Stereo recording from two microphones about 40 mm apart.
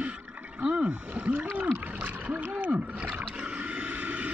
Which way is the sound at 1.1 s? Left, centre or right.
Right.